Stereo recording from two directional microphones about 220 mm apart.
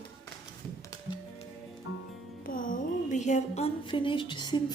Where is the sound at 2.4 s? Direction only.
40° left (ahead or behind).